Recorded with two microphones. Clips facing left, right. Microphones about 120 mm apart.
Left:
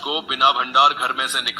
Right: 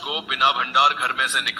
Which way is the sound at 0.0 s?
20° left (ahead or behind).